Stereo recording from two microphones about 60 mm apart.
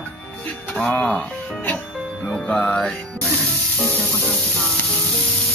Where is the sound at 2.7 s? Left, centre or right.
Centre.